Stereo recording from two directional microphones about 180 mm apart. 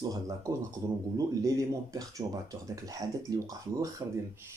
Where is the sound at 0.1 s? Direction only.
15° right (ahead or behind).